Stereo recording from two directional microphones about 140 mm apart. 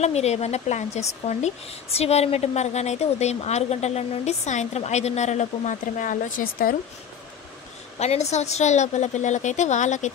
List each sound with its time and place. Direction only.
0.0 s a woman's voice: 50° left (ahead or behind); by 6.8 s 90° left
8.0 s a woman's voice: 50° left (ahead or behind)